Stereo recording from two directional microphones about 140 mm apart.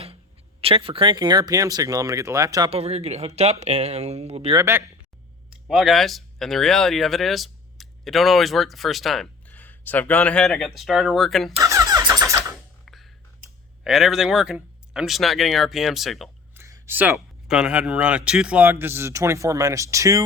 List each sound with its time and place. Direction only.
0.6 s speech: 40° right (ahead or behind); by 2.6 s 25° right (ahead or behind)
2.6 s speech: 45° right (ahead or behind)
4.5 s speech: 20° right (ahead or behind)
5.5 s speech: 5° right (ahead or behind)
11.5 s vehicle: 20° right (ahead or behind)
12.8 s a sound: centre (ahead or behind)
13.8 s speech: 5° right (ahead or behind)
16.6 s a sound: 20° right (ahead or behind)
17.2 s a man's voice: 5° right (ahead or behind); by 20.2 s 25° right (ahead or behind)